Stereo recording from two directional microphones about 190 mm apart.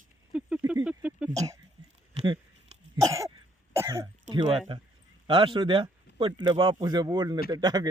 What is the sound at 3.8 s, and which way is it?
Speech, 15° right (ahead or behind).